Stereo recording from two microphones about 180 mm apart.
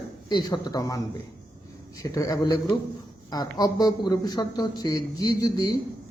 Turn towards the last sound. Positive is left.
turn(degrees=20)  # may be behind; listen again after turning